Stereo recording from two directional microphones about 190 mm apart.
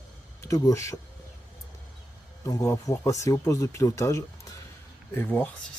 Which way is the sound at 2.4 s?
15° left (ahead or behind).